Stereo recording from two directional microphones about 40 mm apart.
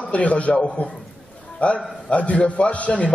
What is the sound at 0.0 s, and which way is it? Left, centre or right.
A man's voice, left.